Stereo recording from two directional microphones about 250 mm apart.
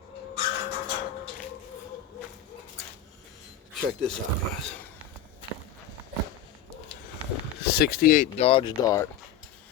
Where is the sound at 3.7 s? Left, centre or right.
Centre.